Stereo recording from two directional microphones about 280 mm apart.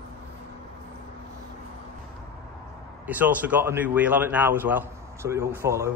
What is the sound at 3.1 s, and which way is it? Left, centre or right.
A man's voice, centre.